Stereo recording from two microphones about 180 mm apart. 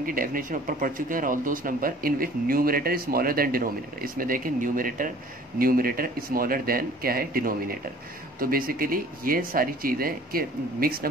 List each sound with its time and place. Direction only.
0.0 s speech: 50° right (ahead or behind)